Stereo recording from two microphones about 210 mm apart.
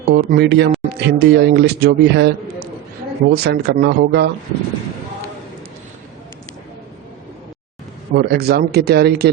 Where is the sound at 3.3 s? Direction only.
50° right (ahead or behind).